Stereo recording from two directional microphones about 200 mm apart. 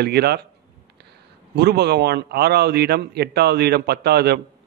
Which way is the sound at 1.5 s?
55° right (ahead or behind).